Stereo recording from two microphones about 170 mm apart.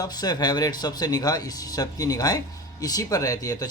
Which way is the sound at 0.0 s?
25° left (ahead or behind).